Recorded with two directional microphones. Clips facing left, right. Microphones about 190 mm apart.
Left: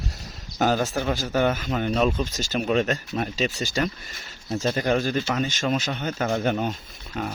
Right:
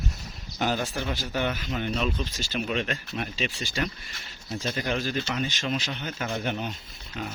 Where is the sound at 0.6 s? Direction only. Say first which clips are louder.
Left 5 dB; 45° left (ahead or behind).